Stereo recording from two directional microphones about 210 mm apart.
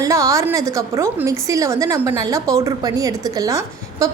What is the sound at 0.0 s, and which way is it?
A woman's voice, 15° right (ahead or behind).